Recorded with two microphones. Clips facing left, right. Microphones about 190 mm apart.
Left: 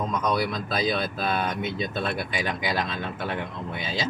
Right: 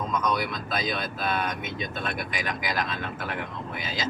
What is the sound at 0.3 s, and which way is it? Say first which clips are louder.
Speech: left 3 dB; 35° left (ahead or behind).